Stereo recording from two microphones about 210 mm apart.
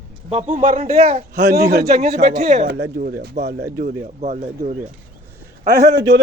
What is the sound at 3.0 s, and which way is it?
Speech, 45° right (ahead or behind).